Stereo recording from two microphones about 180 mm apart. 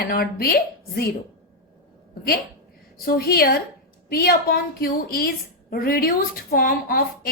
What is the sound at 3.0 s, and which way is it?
A woman's voice, 55° left (ahead or behind).